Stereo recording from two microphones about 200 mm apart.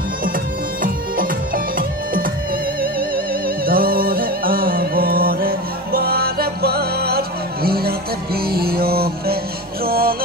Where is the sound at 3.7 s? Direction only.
45° right (ahead or behind).